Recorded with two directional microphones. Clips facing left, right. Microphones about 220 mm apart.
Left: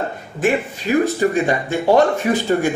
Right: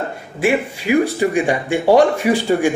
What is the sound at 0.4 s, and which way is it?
Speech, 10° right (ahead or behind).